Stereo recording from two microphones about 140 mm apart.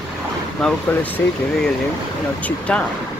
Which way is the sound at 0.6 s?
5° left (ahead or behind).